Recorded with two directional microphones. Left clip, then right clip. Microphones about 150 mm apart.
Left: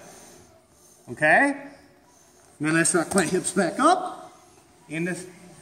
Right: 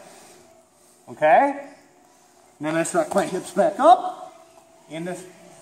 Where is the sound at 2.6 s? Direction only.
5° left (ahead or behind).